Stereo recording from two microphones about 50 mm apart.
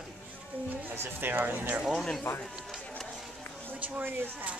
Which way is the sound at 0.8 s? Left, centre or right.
Right.